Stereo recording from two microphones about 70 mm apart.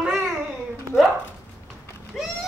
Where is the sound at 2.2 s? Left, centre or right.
Centre.